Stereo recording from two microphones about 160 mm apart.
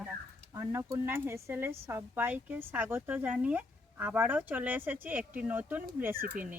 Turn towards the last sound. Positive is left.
turn(degrees=-10)  # may be behind; listen again after turning